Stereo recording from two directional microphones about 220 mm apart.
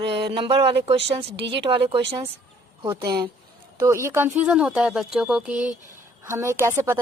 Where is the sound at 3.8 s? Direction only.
10° right (ahead or behind).